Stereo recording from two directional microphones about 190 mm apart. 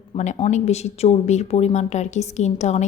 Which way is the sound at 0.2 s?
35° left (ahead or behind).